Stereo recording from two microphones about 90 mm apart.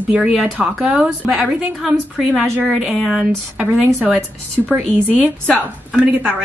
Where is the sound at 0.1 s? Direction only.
5° right (ahead or behind).